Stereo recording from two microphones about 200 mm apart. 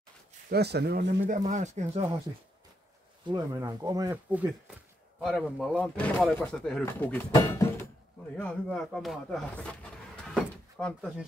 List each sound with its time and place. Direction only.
0.5 s speech: 55° right (ahead or behind)
1.2 s speech: 40° right (ahead or behind)
3.3 s speech: 20° right (ahead or behind)
4.3 s speech: 10° right (ahead or behind)